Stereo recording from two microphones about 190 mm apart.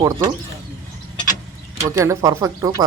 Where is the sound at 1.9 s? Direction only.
15° right (ahead or behind).